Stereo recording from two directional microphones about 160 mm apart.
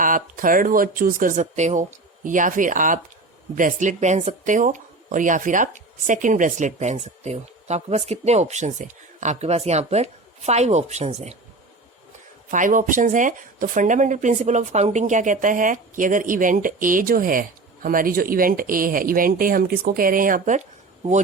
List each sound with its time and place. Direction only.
0.0 s speech: 60° right (ahead or behind); by 11.3 s 40° right (ahead or behind)
12.5 s speech: 55° right (ahead or behind)